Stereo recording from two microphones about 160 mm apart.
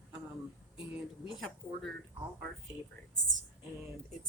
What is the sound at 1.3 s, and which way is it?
Speech, centre (ahead or behind).